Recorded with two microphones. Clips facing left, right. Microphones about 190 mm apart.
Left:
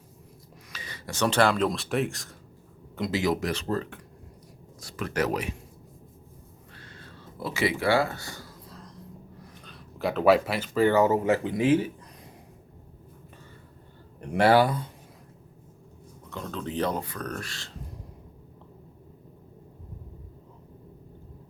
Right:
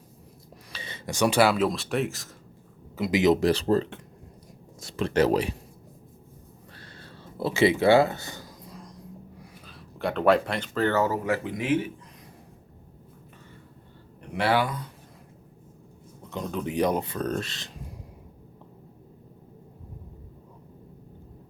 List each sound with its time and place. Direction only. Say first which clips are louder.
0.7 s speech: right 4 dB; 25° right (ahead or behind); by 2.3 s centre (ahead or behind)
3.1 s speech: right 6 dB; 20° right (ahead or behind)
3.4 s speech: right 7 dB; 30° right (ahead or behind)
6.7 s a sound: even; 35° right (ahead or behind); by 8.9 s 15° right (ahead or behind)
9.4 s speech: even; centre (ahead or behind); by 11.9 s 30° left (ahead or behind)
14.3 s speech: left 5 dB; 40° left (ahead or behind)
16.3 s speech: right 3 dB; 15° right (ahead or behind)